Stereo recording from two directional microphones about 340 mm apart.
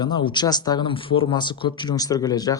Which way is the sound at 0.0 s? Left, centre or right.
Centre.